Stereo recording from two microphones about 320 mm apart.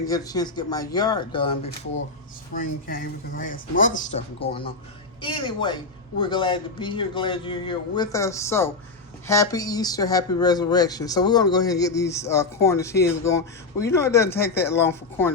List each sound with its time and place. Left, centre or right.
0.0 s speech: centre
2.8 s speech: left; by 15.3 s centre